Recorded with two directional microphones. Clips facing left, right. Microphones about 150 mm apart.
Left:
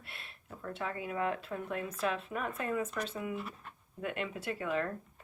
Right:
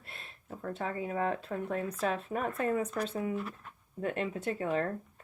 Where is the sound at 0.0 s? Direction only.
35° right (ahead or behind).